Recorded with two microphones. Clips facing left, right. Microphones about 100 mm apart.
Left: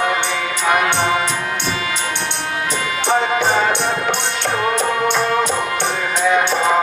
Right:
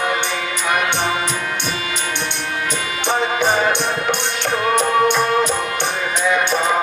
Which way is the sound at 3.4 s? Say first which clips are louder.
Left 1 dB; 15° right (ahead or behind).